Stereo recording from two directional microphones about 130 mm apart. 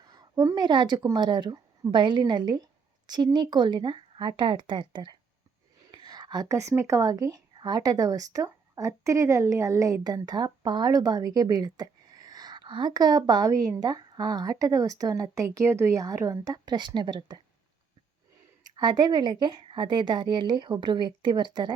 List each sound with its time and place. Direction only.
0.0 s a woman's voice: 30° right (ahead or behind)
18.6 s a woman's voice: 30° right (ahead or behind)